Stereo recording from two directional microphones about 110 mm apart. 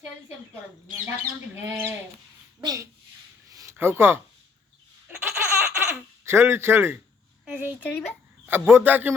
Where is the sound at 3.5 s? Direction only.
30° right (ahead or behind).